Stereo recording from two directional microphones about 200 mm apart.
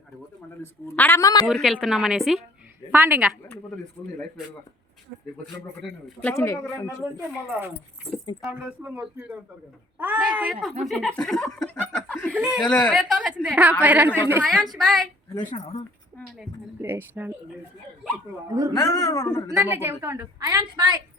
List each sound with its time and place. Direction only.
0.6 s a woman's voice: 10° left (ahead or behind)
1.5 s a woman's voice: centre (ahead or behind)
4.0 s a woman's voice: 10° left (ahead or behind)
5.8 s speech: centre (ahead or behind)
6.3 s a woman's voice: 15° left (ahead or behind)
7.0 s a woman's voice: 10° right (ahead or behind); by 12.3 s 5° left (ahead or behind)
12.3 s a woman's voice: 5° right (ahead or behind)
14.4 s speech: centre (ahead or behind)
15.4 s speech: 35° left (ahead or behind)
16.8 s a woman's voice: 10° right (ahead or behind)
18.4 s a woman's voice: 15° right (ahead or behind)
18.9 s a woman's voice: 20° left (ahead or behind)
19.7 s a woman's voice: 10° right (ahead or behind)